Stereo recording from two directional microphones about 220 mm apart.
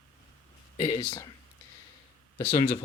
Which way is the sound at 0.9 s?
15° left (ahead or behind).